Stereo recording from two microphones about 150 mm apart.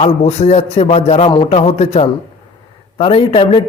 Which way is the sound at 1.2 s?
35° left (ahead or behind).